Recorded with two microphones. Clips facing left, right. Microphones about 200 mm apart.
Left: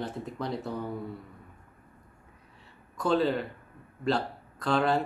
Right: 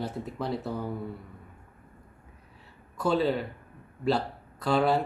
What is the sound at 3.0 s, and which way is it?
Speech, 5° right (ahead or behind).